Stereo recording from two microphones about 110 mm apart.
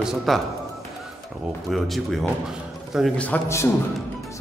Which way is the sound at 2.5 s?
5° right (ahead or behind).